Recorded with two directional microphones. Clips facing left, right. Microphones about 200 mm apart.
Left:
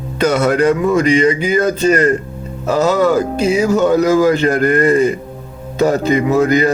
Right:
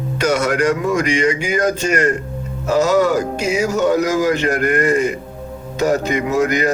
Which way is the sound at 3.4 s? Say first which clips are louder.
Left 6 dB; 30° left (ahead or behind).